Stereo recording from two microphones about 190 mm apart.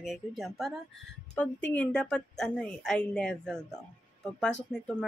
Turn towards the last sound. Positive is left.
turn(degrees=0)  # may be behind; listen again after turning